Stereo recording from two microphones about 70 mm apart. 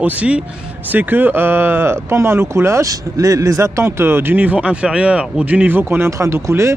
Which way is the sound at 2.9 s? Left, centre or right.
Right.